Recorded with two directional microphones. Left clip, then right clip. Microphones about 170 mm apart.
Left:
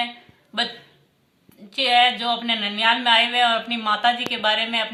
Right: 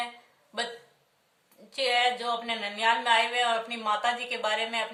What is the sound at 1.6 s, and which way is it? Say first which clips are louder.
Speech: left 8 dB; 50° right (ahead or behind).